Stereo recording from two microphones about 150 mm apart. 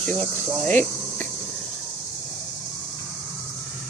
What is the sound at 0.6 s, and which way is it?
Cricket, 10° left (ahead or behind).